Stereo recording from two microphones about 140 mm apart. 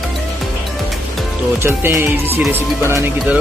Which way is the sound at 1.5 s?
15° right (ahead or behind).